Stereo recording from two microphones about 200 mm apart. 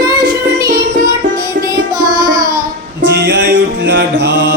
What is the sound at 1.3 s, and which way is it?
Music, 45° right (ahead or behind).